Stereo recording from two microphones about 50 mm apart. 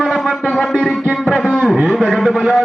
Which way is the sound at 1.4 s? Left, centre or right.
Centre.